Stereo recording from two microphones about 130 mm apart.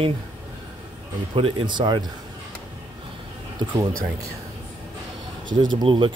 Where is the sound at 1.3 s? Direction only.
40° right (ahead or behind).